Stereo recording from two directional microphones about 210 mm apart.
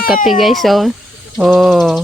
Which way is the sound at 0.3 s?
Centre (ahead or behind).